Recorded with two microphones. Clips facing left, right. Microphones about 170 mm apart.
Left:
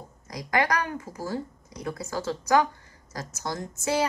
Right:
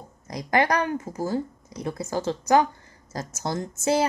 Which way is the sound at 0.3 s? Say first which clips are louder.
Right 3 dB; 25° right (ahead or behind).